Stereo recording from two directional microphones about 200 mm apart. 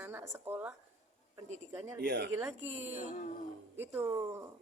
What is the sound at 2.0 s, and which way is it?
Speech, 60° right (ahead or behind).